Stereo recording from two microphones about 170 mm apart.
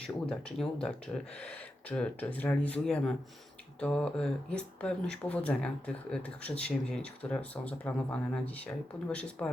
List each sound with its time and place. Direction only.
0.0 s speech: 5° left (ahead or behind)